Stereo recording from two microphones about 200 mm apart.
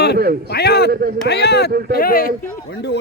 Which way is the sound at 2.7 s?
60° left (ahead or behind).